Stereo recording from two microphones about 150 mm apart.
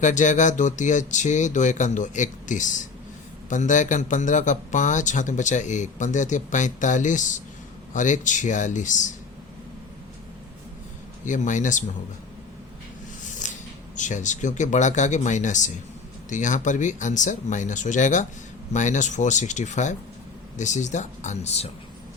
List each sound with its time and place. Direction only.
0.0 s speech: 55° left (ahead or behind)
11.3 s speech: 55° left (ahead or behind)
13.2 s a sound: 55° left (ahead or behind)
13.9 s speech: 55° left (ahead or behind)